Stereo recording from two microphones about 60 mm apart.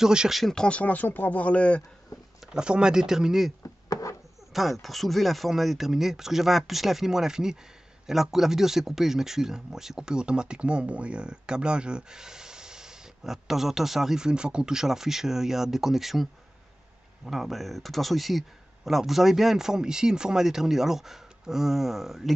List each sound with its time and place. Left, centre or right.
0.0 s speech: centre
0.3 s speech: centre
0.7 s speech: left
2.4 s speech: centre
3.9 s a sound: left
4.5 s speech: centre